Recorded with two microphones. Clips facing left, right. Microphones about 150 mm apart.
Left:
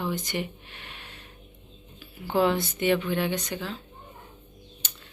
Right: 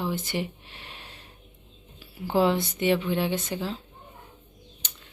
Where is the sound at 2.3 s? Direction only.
25° right (ahead or behind).